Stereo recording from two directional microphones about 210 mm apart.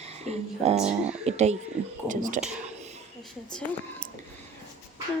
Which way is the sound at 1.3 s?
30° right (ahead or behind).